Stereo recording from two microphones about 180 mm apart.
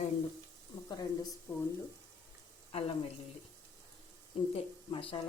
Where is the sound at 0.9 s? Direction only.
20° left (ahead or behind).